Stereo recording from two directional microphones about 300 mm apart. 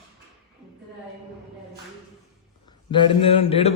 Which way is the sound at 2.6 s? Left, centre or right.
Centre.